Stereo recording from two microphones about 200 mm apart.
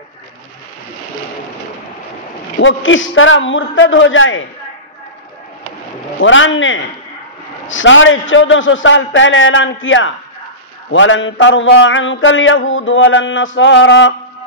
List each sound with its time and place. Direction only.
2.6 s mantra: 75° left (ahead or behind)
6.2 s mantra: 70° left (ahead or behind)